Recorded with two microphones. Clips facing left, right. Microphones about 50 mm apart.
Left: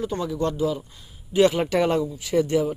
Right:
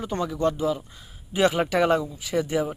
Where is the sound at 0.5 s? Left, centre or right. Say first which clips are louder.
Left 1 dB; centre.